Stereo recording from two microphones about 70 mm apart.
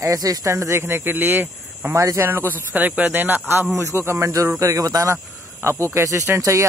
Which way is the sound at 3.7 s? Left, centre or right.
Right.